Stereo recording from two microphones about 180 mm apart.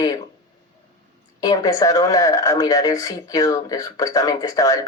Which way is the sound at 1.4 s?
20° left (ahead or behind).